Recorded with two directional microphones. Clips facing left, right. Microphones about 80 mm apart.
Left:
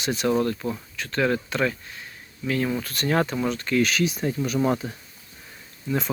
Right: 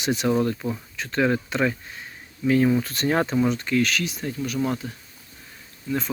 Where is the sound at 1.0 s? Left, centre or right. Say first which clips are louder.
Right 1 dB; centre.